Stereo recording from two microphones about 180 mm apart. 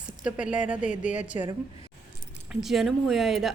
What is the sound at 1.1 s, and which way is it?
Speech, 45° left (ahead or behind).